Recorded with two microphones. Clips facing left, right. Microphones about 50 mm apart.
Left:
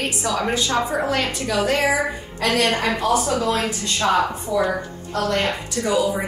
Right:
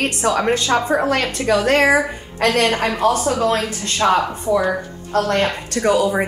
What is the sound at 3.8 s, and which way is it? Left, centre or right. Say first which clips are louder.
A woman's voice: right 4 dB; right.